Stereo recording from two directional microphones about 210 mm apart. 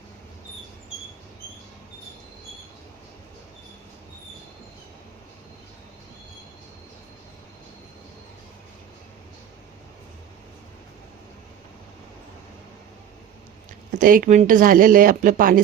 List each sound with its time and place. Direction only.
13.9 s speech: 40° right (ahead or behind)